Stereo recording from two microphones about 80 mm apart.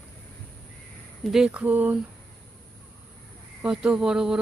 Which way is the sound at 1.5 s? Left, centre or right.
Centre.